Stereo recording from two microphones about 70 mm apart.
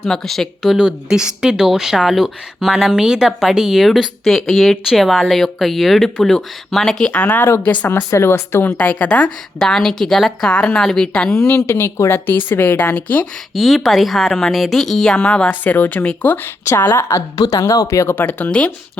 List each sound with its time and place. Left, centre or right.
0.1 s speech: centre
0.8 s speech: centre
7.1 s speech: left
7.9 s speech: left
8.8 s speech: centre
9.6 s speech: centre
10.5 s speech: centre
11.4 s speech: left
13.5 s speech: centre
15.6 s speech: left
16.6 s speech: left
17.3 s speech: left
18.1 s speech: left